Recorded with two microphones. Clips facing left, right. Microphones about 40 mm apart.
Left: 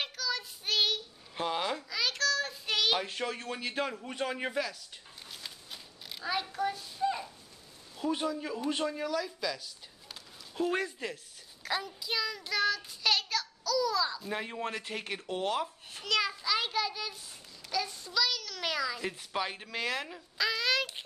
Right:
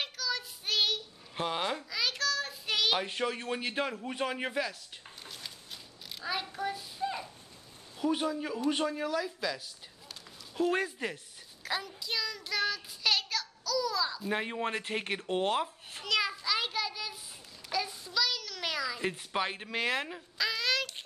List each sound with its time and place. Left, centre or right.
0.0 s child singing: centre
3.1 s a man's voice: centre
5.4 s a sound: centre
8.0 s a man's voice: centre
11.6 s child singing: centre
14.3 s speech: centre
16.0 s a sound: centre
18.9 s a man's voice: centre
20.3 s a sound: centre